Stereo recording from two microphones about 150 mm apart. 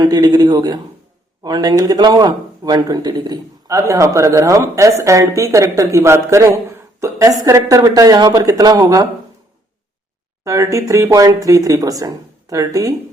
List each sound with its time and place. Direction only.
0.0 s speech: 25° right (ahead or behind)
10.4 s speech: 20° right (ahead or behind)